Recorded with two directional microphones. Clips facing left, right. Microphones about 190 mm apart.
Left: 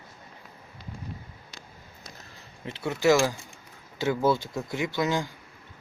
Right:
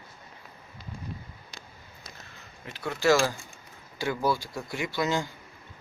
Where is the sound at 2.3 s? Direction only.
25° left (ahead or behind).